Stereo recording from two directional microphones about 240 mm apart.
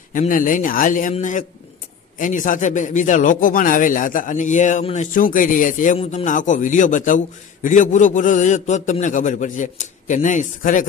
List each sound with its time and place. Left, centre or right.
0.1 s speech: left